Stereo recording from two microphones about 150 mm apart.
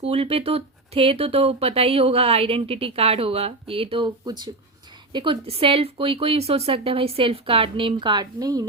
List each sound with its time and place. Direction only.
0.0 s speech: 40° right (ahead or behind); by 8.6 s 25° right (ahead or behind)